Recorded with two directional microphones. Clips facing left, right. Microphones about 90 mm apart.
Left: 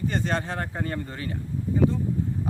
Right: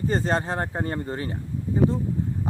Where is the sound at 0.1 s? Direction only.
30° right (ahead or behind).